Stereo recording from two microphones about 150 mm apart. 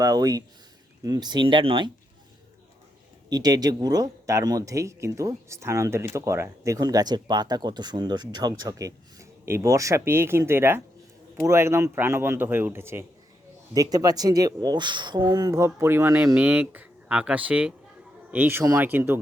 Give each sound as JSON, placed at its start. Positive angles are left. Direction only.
{"t": 0.0, "sound": "speech", "side_deg": -25}
{"t": 3.2, "sound": "a man's voice", "side_deg": -25}